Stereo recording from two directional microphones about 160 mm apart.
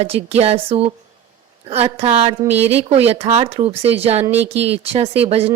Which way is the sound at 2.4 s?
10° right (ahead or behind).